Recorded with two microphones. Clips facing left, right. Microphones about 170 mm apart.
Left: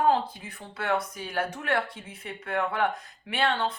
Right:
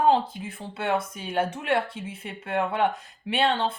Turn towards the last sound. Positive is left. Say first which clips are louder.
# right 3 dB
turn(degrees=-25)  # may be behind; listen again after turning